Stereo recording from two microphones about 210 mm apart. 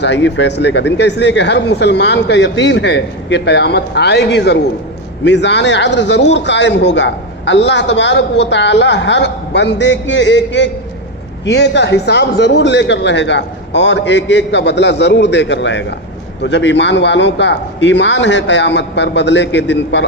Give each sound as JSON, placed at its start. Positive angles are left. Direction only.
{"t": 0.0, "sound": "speech", "side_deg": 55}